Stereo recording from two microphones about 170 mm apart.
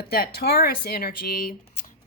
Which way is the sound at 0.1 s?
65° left (ahead or behind).